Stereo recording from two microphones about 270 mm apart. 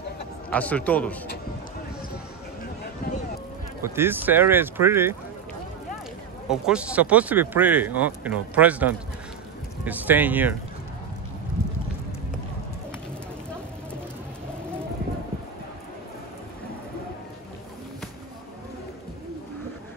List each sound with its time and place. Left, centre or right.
0.5 s speech: centre
3.0 s a sound: left
3.8 s speech: centre
6.5 s speech: centre